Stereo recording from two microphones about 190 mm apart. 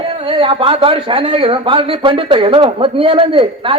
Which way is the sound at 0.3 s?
30° right (ahead or behind).